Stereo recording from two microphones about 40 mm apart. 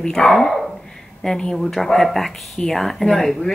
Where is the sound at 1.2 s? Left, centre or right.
Centre.